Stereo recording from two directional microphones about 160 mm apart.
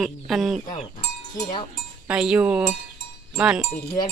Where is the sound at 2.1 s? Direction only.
5° right (ahead or behind).